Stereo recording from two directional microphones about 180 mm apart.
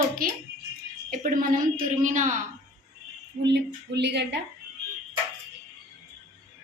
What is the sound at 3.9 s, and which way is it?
Speech, 70° right (ahead or behind).